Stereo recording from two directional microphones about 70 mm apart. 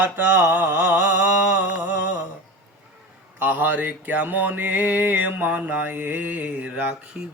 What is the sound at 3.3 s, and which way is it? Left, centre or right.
Mantra, right.